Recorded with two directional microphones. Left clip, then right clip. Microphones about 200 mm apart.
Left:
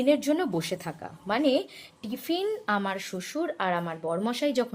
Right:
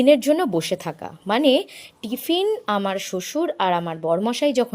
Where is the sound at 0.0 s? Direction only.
40° right (ahead or behind).